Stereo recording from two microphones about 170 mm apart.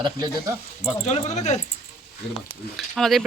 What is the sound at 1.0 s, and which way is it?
Speech, 40° left (ahead or behind).